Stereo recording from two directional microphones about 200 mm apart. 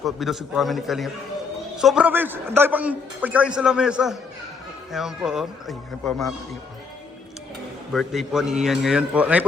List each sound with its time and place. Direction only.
0.0 s a man's voice: centre (ahead or behind)
7.9 s a man's voice: centre (ahead or behind)